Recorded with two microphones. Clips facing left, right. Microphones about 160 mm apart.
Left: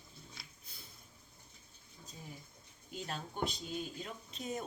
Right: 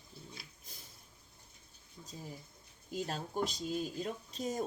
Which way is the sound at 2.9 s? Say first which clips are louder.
Right 6 dB; 40° right (ahead or behind).